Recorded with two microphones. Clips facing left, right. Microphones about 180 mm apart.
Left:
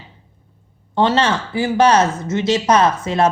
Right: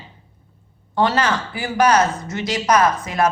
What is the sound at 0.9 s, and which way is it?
Speech, 25° left (ahead or behind).